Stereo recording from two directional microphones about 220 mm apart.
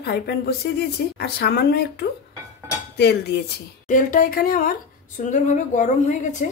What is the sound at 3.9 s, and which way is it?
A woman's voice, 35° left (ahead or behind).